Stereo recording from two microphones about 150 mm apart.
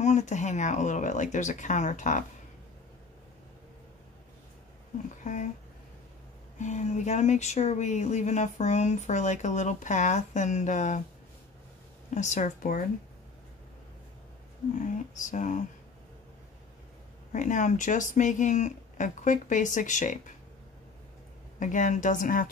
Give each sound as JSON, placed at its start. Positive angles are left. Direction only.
{"t": 0.0, "sound": "speech", "side_deg": 50}
{"t": 5.2, "sound": "speech", "side_deg": 55}
{"t": 6.6, "sound": "speech", "side_deg": 50}
{"t": 12.1, "sound": "speech", "side_deg": 55}
{"t": 14.8, "sound": "speech", "side_deg": 55}
{"t": 17.3, "sound": "speech", "side_deg": 60}
{"t": 21.5, "sound": "speech", "side_deg": 55}